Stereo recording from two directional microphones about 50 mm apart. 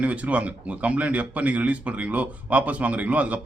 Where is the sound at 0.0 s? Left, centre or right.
Right.